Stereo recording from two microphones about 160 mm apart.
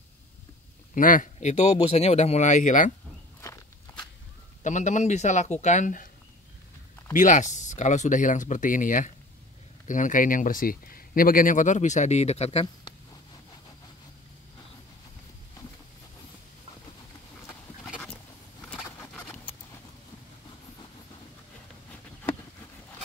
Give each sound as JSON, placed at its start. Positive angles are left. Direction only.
{"t": 0.9, "sound": "speech", "side_deg": 55}
{"t": 4.6, "sound": "speech", "side_deg": 50}
{"t": 7.2, "sound": "speech", "side_deg": 50}